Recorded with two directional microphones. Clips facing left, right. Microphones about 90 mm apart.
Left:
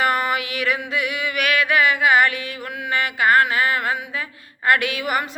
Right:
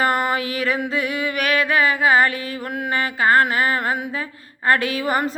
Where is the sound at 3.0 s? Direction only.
30° right (ahead or behind).